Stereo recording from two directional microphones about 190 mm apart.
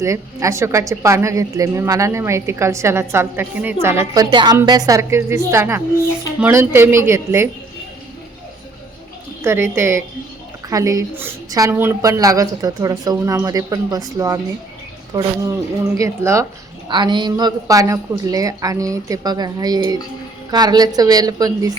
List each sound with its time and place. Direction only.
0.0 s a woman's voice: 15° right (ahead or behind)
9.4 s a woman's voice: 15° right (ahead or behind)
16.0 s a woman's voice: 15° right (ahead or behind)